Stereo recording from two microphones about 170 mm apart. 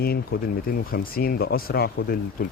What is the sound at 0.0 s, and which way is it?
Speech, 65° left (ahead or behind).